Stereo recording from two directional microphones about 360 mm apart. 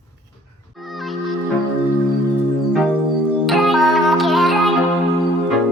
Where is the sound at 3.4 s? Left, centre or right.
Centre.